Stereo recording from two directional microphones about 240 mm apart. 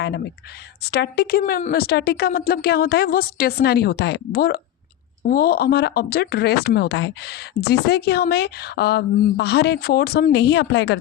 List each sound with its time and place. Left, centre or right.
0.9 s a woman's voice: left